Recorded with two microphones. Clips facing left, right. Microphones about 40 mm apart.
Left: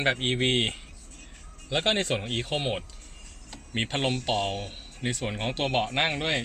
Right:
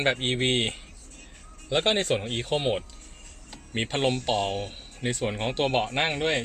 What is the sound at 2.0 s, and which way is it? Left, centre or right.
Speech, centre.